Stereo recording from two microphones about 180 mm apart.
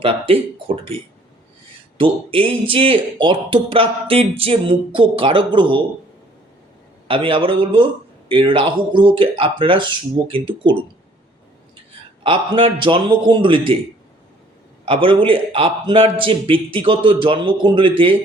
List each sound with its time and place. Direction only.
0.0 s speech: 30° right (ahead or behind)
2.0 s speech: 30° right (ahead or behind)
7.1 s speech: 30° right (ahead or behind)
12.2 s speech: 30° right (ahead or behind)
14.8 s speech: 30° right (ahead or behind)